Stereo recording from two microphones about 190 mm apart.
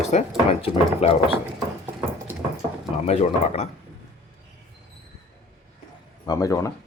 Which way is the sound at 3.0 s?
35° left (ahead or behind).